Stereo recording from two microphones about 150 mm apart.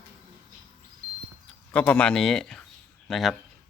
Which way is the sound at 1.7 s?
10° left (ahead or behind).